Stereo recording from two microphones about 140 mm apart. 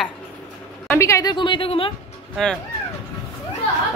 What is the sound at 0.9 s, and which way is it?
A woman's voice, 20° left (ahead or behind).